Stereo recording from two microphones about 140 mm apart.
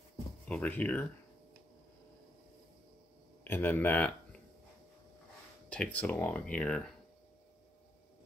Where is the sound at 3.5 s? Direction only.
15° left (ahead or behind).